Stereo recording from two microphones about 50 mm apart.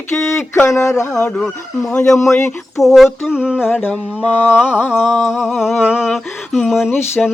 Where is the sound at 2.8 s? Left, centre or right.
Centre.